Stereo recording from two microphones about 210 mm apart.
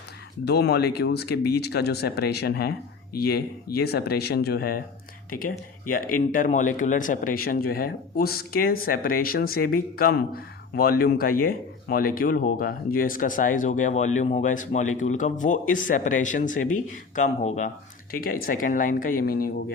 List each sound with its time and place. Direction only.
0.4 s speech: 50° left (ahead or behind)